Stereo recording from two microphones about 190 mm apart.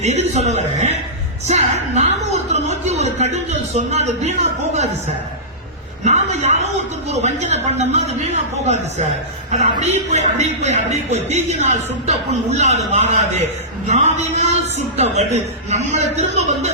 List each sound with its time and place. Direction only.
0.0 s a man's voice: 35° right (ahead or behind)
6.1 s a man's voice: 35° right (ahead or behind)